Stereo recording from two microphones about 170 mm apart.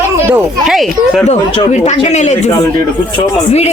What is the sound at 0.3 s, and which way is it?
Speech, 10° right (ahead or behind).